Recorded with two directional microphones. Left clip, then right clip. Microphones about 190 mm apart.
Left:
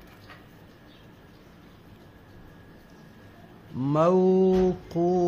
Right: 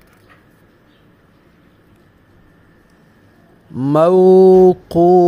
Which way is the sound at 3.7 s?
45° right (ahead or behind).